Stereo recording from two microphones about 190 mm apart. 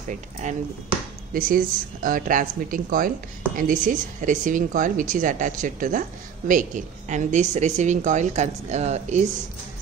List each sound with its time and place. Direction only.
0.1 s a woman's voice: 40° right (ahead or behind)